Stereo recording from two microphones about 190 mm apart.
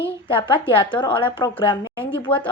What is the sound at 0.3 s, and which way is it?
Speech, 25° left (ahead or behind).